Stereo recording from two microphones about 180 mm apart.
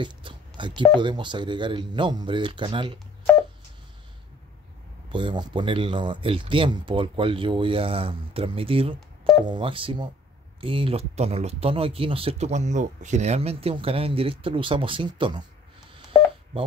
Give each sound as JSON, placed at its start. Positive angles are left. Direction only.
{"t": 0.0, "sound": "telephone dialing", "side_deg": -25}
{"t": 0.9, "sound": "speech", "side_deg": -25}
{"t": 5.1, "sound": "speech", "side_deg": -25}